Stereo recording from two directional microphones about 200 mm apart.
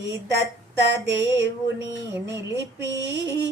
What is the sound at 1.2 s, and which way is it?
Speech, 60° right (ahead or behind).